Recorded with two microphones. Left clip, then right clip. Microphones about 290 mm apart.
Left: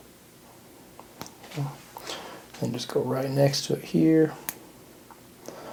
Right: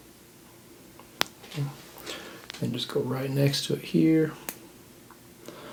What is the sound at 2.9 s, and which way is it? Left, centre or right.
Speech, centre.